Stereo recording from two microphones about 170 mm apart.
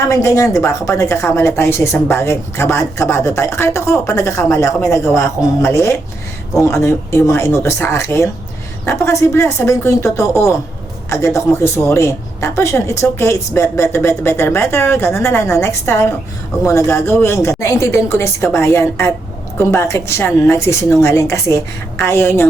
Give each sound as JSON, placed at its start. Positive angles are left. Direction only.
{"t": 0.1, "sound": "speech", "side_deg": 20}